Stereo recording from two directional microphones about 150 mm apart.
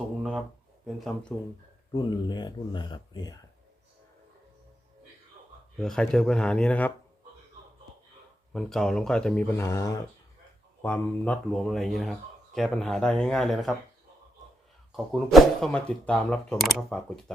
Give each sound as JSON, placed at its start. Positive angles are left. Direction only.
{"t": 0.2, "sound": "speech", "side_deg": -5}
{"t": 1.9, "sound": "speech", "side_deg": 30}
{"t": 5.8, "sound": "speech", "side_deg": 5}
{"t": 8.5, "sound": "speech", "side_deg": 5}
{"t": 9.6, "sound": "speech", "side_deg": 20}
{"t": 10.8, "sound": "speech", "side_deg": 10}
{"t": 14.9, "sound": "speech", "side_deg": 0}